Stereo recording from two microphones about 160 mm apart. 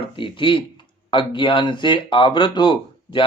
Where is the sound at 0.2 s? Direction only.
30° left (ahead or behind).